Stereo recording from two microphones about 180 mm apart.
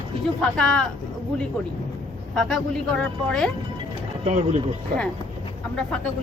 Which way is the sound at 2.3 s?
5° left (ahead or behind).